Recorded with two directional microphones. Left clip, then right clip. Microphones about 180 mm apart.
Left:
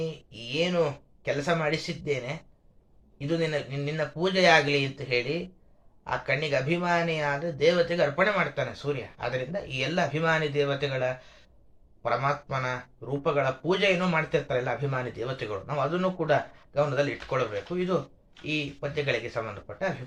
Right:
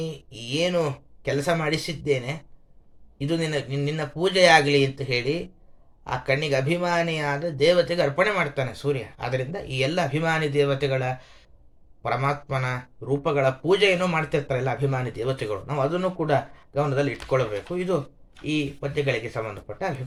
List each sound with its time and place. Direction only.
0.0 s speech: 40° right (ahead or behind)